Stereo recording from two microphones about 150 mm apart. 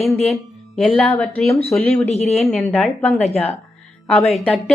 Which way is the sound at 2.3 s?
5° left (ahead or behind).